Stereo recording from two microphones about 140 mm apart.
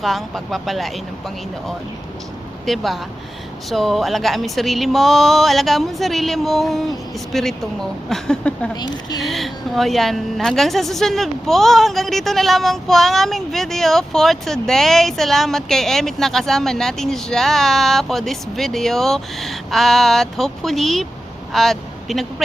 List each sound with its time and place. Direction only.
0.0 s a woman's voice: centre (ahead or behind)
2.6 s a woman's voice: centre (ahead or behind)
8.7 s speech: 30° left (ahead or behind)
9.2 s a woman's voice: centre (ahead or behind)